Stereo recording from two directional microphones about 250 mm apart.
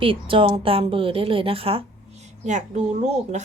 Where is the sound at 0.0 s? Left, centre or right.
Right.